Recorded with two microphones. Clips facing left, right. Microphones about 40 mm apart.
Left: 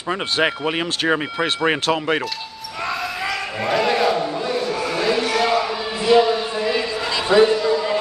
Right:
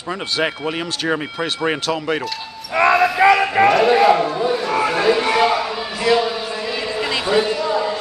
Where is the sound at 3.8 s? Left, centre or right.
Centre.